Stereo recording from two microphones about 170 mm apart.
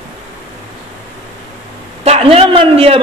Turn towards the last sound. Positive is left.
turn(degrees=-35)  # may be behind; listen again after turning